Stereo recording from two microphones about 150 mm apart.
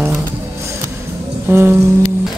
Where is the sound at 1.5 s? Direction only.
15° right (ahead or behind).